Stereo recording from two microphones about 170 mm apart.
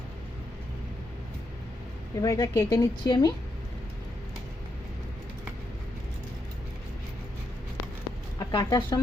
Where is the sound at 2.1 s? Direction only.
20° left (ahead or behind).